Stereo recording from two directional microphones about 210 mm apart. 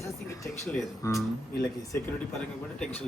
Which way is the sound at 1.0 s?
15° left (ahead or behind).